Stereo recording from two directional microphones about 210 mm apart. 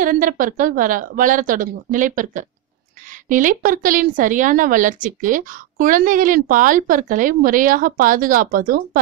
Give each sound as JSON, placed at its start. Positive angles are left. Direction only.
{"t": 0.0, "sound": "a woman's voice", "side_deg": -40}